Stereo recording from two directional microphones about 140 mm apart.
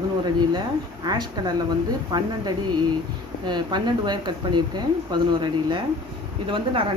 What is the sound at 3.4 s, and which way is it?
Speech, 30° right (ahead or behind).